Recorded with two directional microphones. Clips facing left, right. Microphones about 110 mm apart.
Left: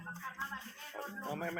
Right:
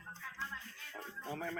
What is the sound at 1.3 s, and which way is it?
Speech, 5° left (ahead or behind).